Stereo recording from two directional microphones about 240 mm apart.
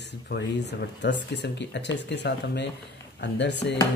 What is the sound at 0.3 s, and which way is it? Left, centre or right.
Speech, left.